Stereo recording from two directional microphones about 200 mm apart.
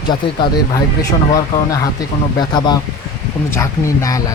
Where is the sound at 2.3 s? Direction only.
20° left (ahead or behind).